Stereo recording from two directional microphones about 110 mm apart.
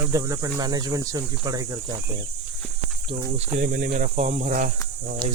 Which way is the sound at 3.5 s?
90° right.